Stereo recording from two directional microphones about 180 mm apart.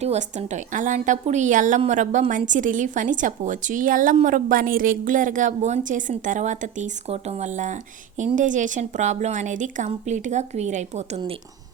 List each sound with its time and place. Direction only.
0.0 s a woman's voice: 40° right (ahead or behind)